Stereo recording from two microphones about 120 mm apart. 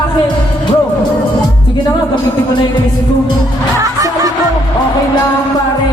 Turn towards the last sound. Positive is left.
turn(degrees=-30)  # may be behind; listen again after turning